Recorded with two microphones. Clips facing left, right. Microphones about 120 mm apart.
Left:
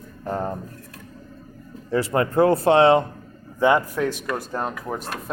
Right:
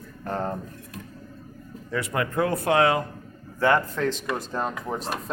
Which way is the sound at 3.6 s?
15° left (ahead or behind).